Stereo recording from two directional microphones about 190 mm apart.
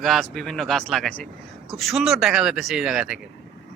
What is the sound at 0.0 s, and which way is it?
A man's voice, centre (ahead or behind).